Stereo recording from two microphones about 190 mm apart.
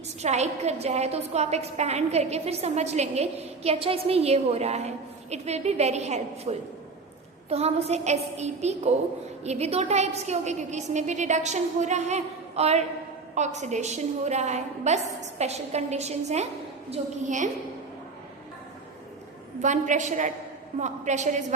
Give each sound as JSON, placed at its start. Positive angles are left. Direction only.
{"t": 0.2, "sound": "a woman's voice", "side_deg": -35}
{"t": 19.6, "sound": "a woman's voice", "side_deg": -40}